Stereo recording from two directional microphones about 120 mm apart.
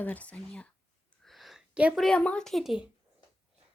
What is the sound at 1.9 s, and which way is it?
Speech, 5° left (ahead or behind).